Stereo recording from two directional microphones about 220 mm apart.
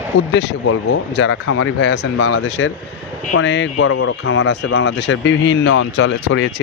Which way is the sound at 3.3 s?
55° left (ahead or behind).